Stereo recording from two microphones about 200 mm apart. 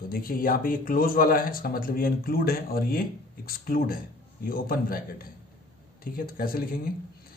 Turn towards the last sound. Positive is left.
turn(degrees=45)  # may be behind; listen again after turning